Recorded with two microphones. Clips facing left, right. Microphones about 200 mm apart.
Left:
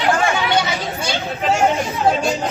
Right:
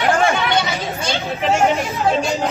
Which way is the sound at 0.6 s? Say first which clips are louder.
Even; centre (ahead or behind).